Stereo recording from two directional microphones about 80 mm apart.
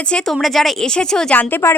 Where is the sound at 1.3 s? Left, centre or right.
Left.